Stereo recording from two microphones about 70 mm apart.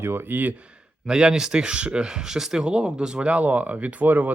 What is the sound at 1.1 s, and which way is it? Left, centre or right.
Speech, centre.